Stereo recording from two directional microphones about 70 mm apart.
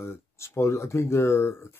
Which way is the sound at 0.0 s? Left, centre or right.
Left.